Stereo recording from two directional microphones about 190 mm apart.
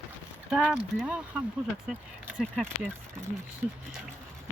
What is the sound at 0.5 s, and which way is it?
Speech, centre (ahead or behind).